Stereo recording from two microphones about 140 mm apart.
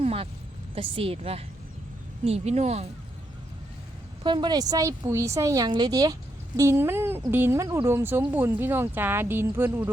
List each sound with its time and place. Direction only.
0.0 s a sound: 45° right (ahead or behind)
0.8 s a woman's voice: 40° right (ahead or behind)
4.2 s a woman's voice: 35° right (ahead or behind); by 9.9 s 15° right (ahead or behind)